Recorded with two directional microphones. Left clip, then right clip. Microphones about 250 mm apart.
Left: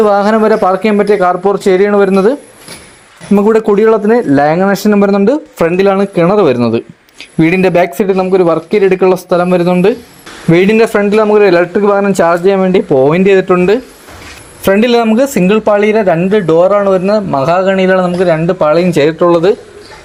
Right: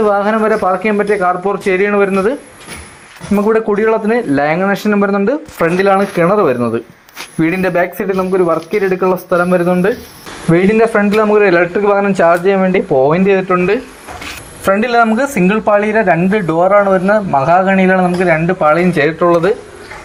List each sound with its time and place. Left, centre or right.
0.0 s speech: left
3.3 s a man's voice: left